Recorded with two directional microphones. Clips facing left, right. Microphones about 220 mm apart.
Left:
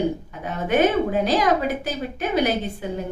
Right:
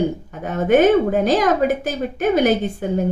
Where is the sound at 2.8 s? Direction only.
50° right (ahead or behind).